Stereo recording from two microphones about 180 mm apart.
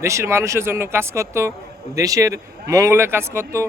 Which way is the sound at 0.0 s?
15° right (ahead or behind).